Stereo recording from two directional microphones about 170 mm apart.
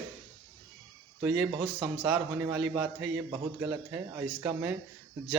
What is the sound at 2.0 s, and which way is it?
A man's voice, 15° right (ahead or behind).